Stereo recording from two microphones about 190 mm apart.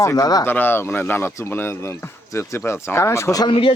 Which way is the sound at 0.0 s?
15° left (ahead or behind).